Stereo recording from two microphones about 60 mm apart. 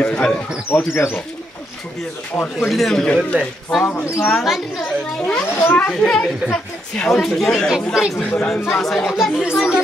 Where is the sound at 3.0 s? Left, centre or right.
Centre.